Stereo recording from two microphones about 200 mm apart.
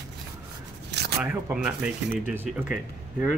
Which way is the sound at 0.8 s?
55° right (ahead or behind).